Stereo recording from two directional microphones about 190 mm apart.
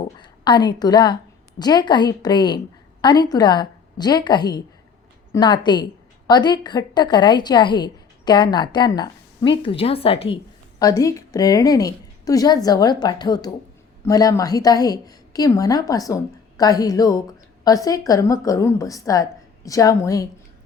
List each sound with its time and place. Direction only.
0.2 s a woman's voice: 25° left (ahead or behind)